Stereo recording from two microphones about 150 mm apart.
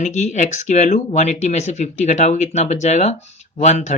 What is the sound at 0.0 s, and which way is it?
Speech, 50° left (ahead or behind).